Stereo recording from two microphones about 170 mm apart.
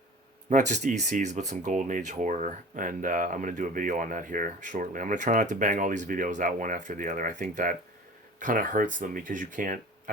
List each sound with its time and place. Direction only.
0.5 s speech: 45° right (ahead or behind)